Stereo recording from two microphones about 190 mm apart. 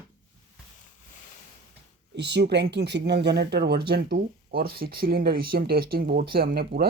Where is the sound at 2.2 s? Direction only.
60° right (ahead or behind).